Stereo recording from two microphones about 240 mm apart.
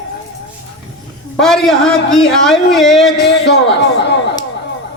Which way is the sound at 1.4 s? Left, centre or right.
Centre.